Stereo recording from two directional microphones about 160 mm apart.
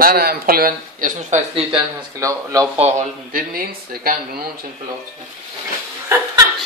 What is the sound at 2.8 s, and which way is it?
Speech, 55° right (ahead or behind).